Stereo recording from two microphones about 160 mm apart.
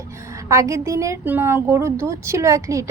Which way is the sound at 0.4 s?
20° right (ahead or behind).